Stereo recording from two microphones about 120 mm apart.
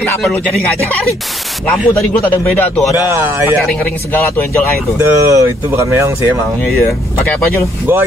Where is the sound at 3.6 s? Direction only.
10° left (ahead or behind).